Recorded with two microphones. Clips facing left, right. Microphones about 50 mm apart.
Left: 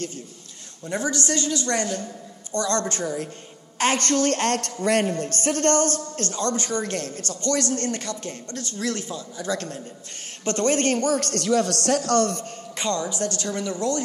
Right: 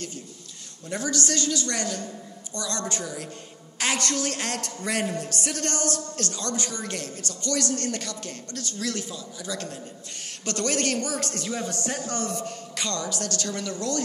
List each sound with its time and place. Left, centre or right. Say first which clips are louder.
0.9 s a woman's voice: left 2 dB; left
12.7 s speech: left 5 dB; left